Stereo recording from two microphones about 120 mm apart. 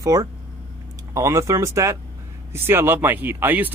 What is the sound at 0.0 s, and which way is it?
Speech, 30° right (ahead or behind).